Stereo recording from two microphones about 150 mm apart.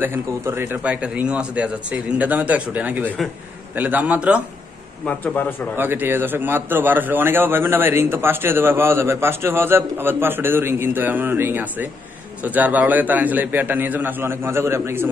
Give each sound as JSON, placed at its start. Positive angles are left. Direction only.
{"t": 0.0, "sound": "a man's voice", "side_deg": -15}
{"t": 5.0, "sound": "a man's voice", "side_deg": 10}
{"t": 5.8, "sound": "a man's voice", "side_deg": -15}